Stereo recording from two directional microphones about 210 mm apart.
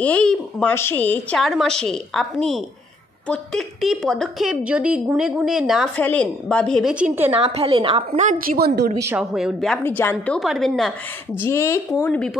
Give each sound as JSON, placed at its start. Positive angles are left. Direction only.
{"t": 0.0, "sound": "a woman's voice", "side_deg": 5}
{"t": 7.3, "sound": "a woman's voice", "side_deg": -30}
{"t": 8.9, "sound": "a woman's voice", "side_deg": -15}
{"t": 9.2, "sound": "a woman's voice", "side_deg": 0}
{"t": 9.8, "sound": "a woman's voice", "side_deg": 10}
{"t": 11.3, "sound": "a woman's voice", "side_deg": 10}